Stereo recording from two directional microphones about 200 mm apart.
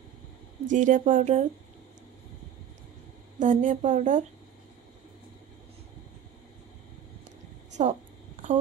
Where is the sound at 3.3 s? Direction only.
40° right (ahead or behind).